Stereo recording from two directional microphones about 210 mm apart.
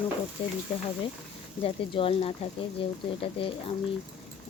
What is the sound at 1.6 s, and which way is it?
Speech, 25° left (ahead or behind).